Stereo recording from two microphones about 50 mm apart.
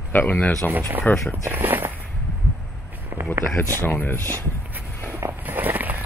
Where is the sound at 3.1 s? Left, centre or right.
Right.